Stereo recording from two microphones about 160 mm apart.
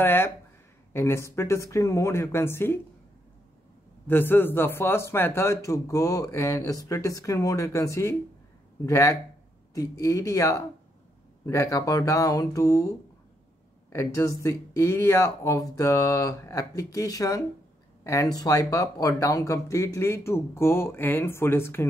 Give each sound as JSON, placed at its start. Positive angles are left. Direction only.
{"t": 0.0, "sound": "speech", "side_deg": 15}
{"t": 4.1, "sound": "speech", "side_deg": 15}
{"t": 13.9, "sound": "speech", "side_deg": 20}